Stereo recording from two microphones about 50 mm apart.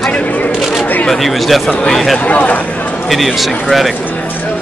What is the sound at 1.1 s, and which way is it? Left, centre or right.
Speech, centre.